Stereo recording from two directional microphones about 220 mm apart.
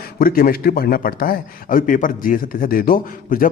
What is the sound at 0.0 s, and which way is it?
A man's voice, 40° left (ahead or behind).